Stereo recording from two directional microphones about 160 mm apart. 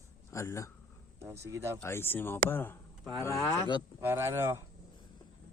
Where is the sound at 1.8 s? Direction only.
15° left (ahead or behind).